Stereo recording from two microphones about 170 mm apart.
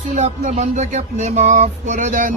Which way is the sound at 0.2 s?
45° right (ahead or behind).